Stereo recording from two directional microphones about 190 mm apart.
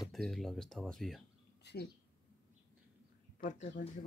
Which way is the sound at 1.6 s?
60° left (ahead or behind).